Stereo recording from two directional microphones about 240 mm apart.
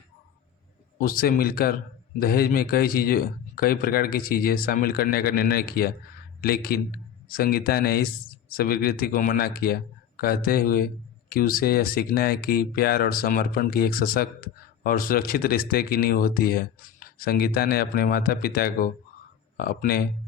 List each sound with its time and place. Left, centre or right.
0.9 s a man's voice: left